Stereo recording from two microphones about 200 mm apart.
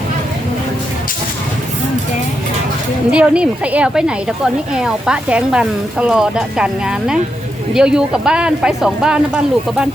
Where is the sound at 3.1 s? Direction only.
5° right (ahead or behind).